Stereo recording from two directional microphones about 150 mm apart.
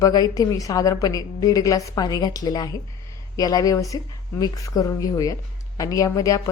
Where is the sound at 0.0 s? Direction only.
25° left (ahead or behind).